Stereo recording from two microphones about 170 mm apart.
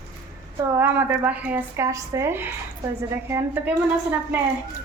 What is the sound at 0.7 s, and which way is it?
A woman's voice, 10° right (ahead or behind).